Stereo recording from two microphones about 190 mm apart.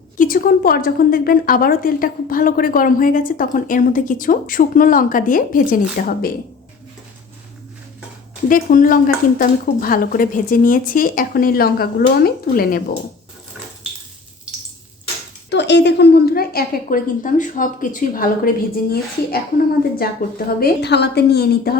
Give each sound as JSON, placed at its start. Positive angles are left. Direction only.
{"t": 0.2, "sound": "a woman's voice", "side_deg": 45}
{"t": 8.4, "sound": "a woman's voice", "side_deg": 45}
{"t": 15.4, "sound": "a woman's voice", "side_deg": 65}